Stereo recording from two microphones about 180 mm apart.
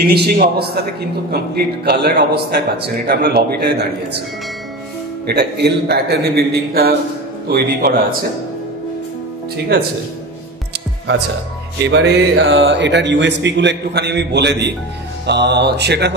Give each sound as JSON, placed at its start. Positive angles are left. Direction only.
{"t": 0.0, "sound": "a man's voice", "side_deg": -65}
{"t": 1.9, "sound": "a man's voice", "side_deg": -65}
{"t": 5.2, "sound": "a man's voice", "side_deg": -65}
{"t": 11.8, "sound": "speech", "side_deg": -70}